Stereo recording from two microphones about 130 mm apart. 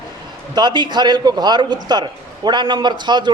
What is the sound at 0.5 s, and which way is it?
A man's voice, 35° right (ahead or behind).